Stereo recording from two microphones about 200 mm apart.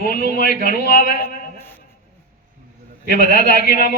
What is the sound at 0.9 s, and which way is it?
Speech, 45° left (ahead or behind).